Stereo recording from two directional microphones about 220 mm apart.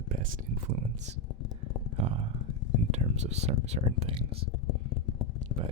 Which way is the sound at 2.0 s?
25° right (ahead or behind).